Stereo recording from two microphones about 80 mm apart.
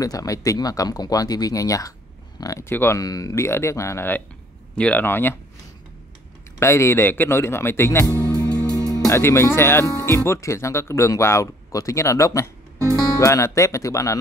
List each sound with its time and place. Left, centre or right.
0.0 s speech: left
2.4 s speech: left
2.7 s speech: left
3.0 s speech: left
3.4 s speech: left
4.7 s speech: centre
6.6 s speech: left
8.6 s music: left
9.1 s speech: left